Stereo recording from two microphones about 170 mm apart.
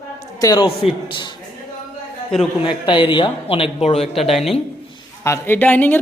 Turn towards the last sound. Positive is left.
turn(degrees=10)  # may be behind; listen again after turning